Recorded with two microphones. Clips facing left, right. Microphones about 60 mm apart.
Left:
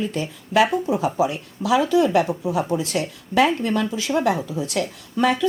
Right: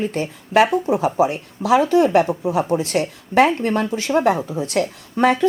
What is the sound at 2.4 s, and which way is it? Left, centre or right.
Speech, right.